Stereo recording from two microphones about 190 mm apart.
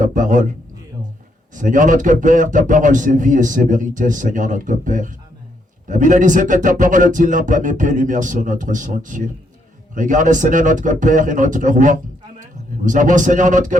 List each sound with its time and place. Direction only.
0.0 s speech: 45° right (ahead or behind)
1.5 s a man's voice: 45° right (ahead or behind)